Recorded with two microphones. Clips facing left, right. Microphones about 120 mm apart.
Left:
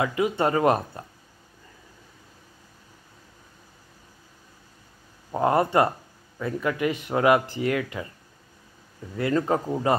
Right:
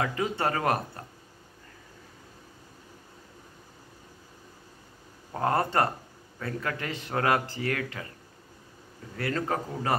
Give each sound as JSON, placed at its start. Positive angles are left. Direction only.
{"t": 0.0, "sound": "speech", "side_deg": 20}
{"t": 5.3, "sound": "speech", "side_deg": 20}
{"t": 9.1, "sound": "speech", "side_deg": 20}